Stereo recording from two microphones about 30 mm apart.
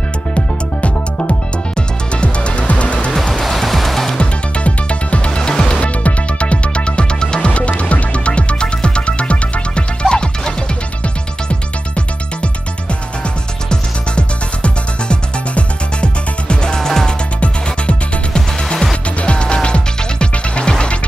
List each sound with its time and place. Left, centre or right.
0.3 s music: left
3.3 s music: centre
4.2 s music: left
5.7 s music: left
7.4 s music: left
10.0 s music: left
11.4 s music: left
13.7 s music: left
16.6 s music: left